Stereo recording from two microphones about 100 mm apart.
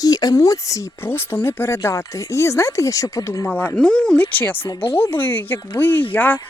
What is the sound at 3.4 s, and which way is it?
Speech, 15° left (ahead or behind).